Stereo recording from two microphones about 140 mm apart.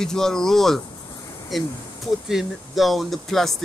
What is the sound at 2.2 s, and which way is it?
Speech, centre (ahead or behind).